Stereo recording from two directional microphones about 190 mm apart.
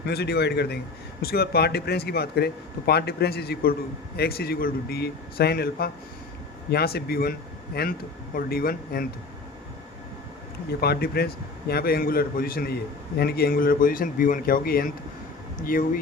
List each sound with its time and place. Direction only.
0.1 s a man's voice: 60° left (ahead or behind)
10.7 s a man's voice: 55° left (ahead or behind)